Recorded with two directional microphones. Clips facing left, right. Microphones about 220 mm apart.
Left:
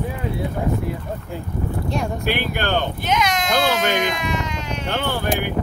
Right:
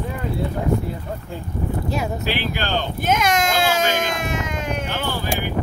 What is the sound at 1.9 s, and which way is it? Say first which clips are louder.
Speech: left 2 dB; 5° right (ahead or behind).